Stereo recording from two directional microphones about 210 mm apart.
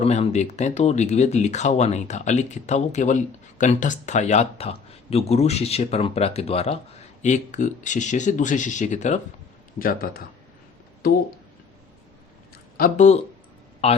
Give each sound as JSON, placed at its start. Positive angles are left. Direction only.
{"t": 0.0, "sound": "speech", "side_deg": 30}
{"t": 12.7, "sound": "a man's voice", "side_deg": 40}